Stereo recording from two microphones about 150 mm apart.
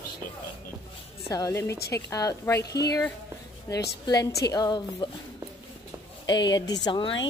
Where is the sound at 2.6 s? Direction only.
90° left.